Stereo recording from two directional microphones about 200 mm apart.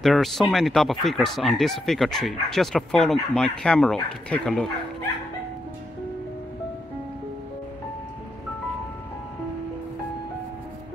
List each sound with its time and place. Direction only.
0.0 s speech: centre (ahead or behind)